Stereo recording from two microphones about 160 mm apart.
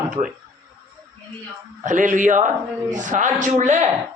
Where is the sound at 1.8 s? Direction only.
55° right (ahead or behind).